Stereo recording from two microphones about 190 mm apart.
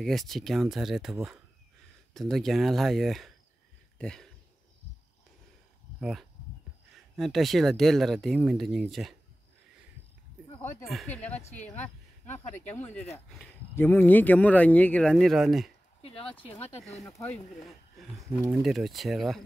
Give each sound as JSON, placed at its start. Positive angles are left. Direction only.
{"t": 0.0, "sound": "speech", "side_deg": 0}
{"t": 2.1, "sound": "speech", "side_deg": 0}
{"t": 4.0, "sound": "a sound", "side_deg": 5}
{"t": 5.9, "sound": "speech", "side_deg": -5}
{"t": 11.1, "sound": "speech", "side_deg": 10}
{"t": 11.5, "sound": "speech", "side_deg": 40}
{"t": 13.4, "sound": "speech", "side_deg": 10}
{"t": 16.0, "sound": "speech", "side_deg": 30}
{"t": 18.4, "sound": "speech", "side_deg": -5}